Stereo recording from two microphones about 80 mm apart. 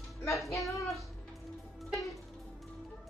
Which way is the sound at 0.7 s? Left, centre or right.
Left.